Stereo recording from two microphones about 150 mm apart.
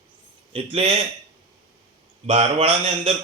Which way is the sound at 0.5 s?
40° right (ahead or behind).